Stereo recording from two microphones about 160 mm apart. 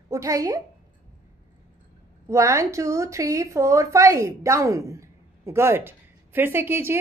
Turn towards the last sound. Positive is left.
turn(degrees=-15)  # may be behind; listen again after turning